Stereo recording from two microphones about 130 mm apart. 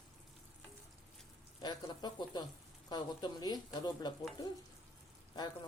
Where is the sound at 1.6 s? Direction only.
35° left (ahead or behind).